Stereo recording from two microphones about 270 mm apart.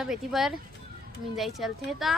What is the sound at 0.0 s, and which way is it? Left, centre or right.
A woman's voice, centre.